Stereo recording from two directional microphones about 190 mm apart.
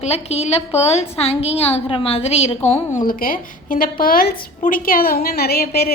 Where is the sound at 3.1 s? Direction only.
50° left (ahead or behind).